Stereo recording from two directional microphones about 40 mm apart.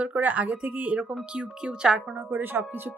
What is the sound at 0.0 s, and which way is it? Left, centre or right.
A woman's voice, right.